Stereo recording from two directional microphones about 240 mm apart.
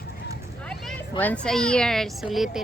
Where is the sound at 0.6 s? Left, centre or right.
Centre.